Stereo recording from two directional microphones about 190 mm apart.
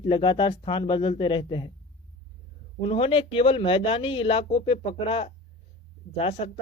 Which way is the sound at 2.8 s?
30° left (ahead or behind).